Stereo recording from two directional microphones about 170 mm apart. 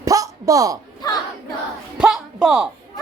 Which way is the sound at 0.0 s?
20° right (ahead or behind).